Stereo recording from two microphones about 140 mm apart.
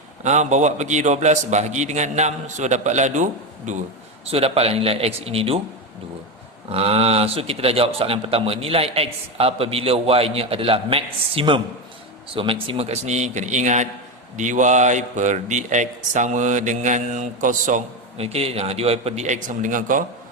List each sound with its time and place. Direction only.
0.2 s speech: 55° right (ahead or behind)
4.3 s a man's voice: 45° right (ahead or behind)
6.7 s a man's voice: 45° right (ahead or behind); by 17.8 s 65° right (ahead or behind)
18.2 s a man's voice: 45° right (ahead or behind); by 20.1 s 70° right (ahead or behind)